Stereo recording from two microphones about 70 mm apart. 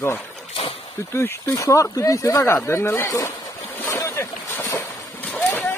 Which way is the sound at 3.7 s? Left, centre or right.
Left.